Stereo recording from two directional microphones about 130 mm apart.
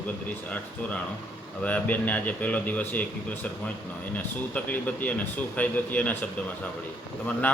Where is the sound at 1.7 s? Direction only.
10° left (ahead or behind).